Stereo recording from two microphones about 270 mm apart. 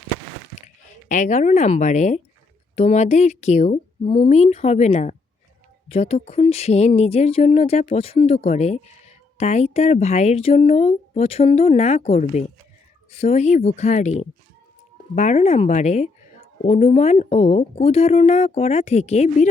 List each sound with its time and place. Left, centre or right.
1.0 s speech: left